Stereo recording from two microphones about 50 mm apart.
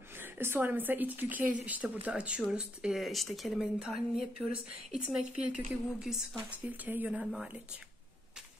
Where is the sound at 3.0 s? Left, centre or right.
Centre.